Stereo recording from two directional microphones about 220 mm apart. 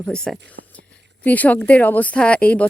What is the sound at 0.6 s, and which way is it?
Whispering, 55° right (ahead or behind).